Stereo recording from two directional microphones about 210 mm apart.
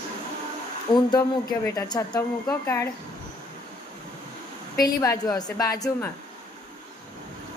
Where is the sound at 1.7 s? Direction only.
20° left (ahead or behind).